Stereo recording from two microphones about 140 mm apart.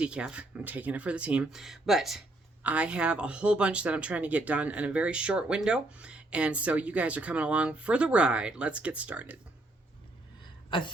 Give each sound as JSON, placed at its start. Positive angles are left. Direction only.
{"t": 0.0, "sound": "speech", "side_deg": -5}
{"t": 10.7, "sound": "speech", "side_deg": 35}